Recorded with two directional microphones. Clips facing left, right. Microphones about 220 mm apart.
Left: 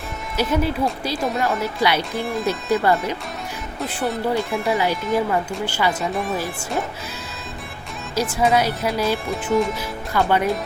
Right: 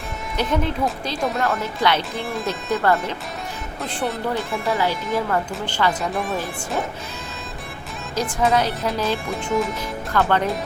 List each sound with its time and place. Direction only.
0.3 s speech: 5° left (ahead or behind)
2.1 s speech: centre (ahead or behind)
2.5 s speech: 10° left (ahead or behind)
3.8 s speech: centre (ahead or behind)
4.6 s speech: 15° left (ahead or behind)
8.1 s speech: 10° left (ahead or behind)
9.2 s speech: centre (ahead or behind)
10.1 s speech: 10° left (ahead or behind)